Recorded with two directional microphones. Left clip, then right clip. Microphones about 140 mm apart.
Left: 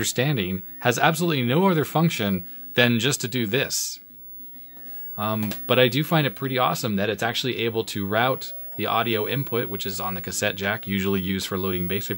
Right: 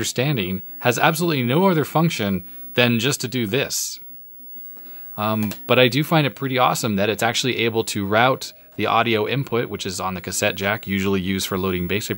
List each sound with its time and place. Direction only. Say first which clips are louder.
0.0 s speech: right 2 dB; 20° right (ahead or behind)
5.1 s speech: right 4 dB; 30° right (ahead or behind)